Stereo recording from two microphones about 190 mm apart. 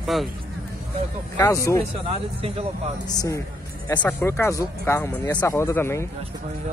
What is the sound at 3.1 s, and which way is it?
Speech, 20° left (ahead or behind).